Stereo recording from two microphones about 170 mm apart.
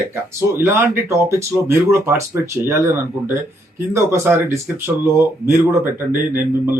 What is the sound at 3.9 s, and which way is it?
Speech, 15° right (ahead or behind).